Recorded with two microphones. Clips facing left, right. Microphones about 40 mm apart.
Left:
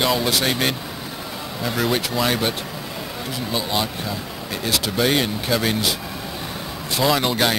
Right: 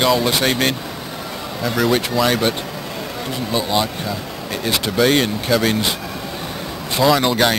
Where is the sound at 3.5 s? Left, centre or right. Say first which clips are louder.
Right 4 dB; centre.